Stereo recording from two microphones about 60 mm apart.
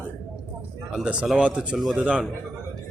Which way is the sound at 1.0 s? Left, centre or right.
Centre.